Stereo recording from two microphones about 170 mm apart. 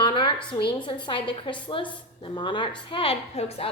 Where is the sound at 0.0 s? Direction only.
30° left (ahead or behind).